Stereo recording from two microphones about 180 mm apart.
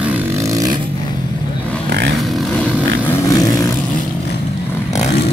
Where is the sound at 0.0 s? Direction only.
10° right (ahead or behind).